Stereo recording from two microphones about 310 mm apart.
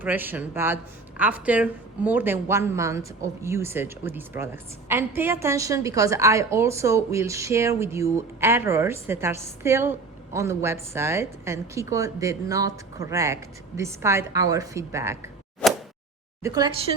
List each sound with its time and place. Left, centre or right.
0.0 s speech: centre
15.6 s a sound: centre
16.4 s speech: centre